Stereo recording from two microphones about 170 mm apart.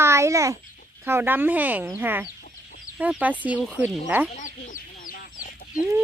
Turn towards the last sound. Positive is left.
turn(degrees=55)  # may be behind; listen again after turning